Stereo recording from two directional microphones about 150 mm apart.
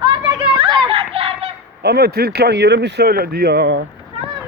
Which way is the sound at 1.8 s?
90° right.